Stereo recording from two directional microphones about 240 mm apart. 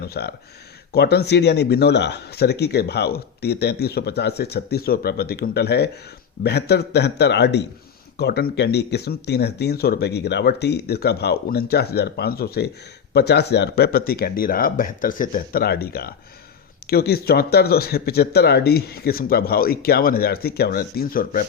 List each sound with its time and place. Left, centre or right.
0.0 s speech: left